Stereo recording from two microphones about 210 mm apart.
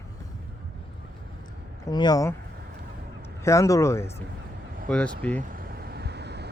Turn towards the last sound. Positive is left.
turn(degrees=-55)  # may be behind; listen again after turning